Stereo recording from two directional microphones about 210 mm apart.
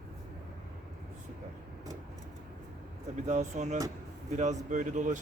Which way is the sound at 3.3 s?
35° right (ahead or behind).